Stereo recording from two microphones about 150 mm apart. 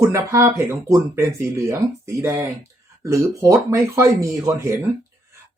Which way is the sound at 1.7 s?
20° right (ahead or behind).